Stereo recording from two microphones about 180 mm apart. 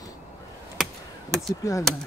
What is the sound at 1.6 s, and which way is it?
Speech, 15° left (ahead or behind).